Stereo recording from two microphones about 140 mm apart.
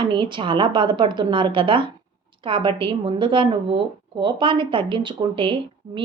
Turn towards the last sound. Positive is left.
turn(degrees=-40)  # may be behind; listen again after turning